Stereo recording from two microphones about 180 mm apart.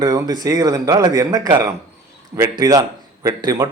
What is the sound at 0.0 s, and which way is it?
A man's voice, 20° right (ahead or behind).